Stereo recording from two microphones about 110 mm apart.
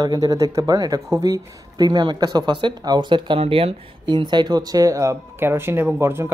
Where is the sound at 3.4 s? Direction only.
60° right (ahead or behind).